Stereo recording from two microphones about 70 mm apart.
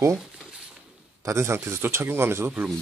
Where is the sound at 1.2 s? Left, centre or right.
Right.